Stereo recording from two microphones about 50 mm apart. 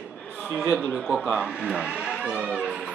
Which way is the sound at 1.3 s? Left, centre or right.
Centre.